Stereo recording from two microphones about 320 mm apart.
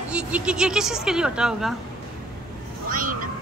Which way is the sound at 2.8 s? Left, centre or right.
Right.